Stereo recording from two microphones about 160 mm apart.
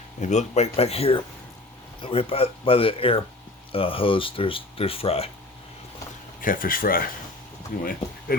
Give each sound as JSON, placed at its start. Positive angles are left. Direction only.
{"t": 0.2, "sound": "speech", "side_deg": 45}
{"t": 6.4, "sound": "speech", "side_deg": 60}
{"t": 8.3, "sound": "speech", "side_deg": 65}